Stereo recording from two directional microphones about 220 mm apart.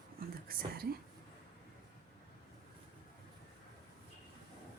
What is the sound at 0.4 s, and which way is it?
Whispering, 45° right (ahead or behind).